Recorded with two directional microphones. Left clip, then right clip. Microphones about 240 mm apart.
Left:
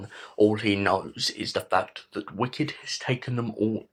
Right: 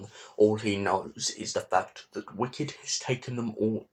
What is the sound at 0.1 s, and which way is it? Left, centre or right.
Speech, centre.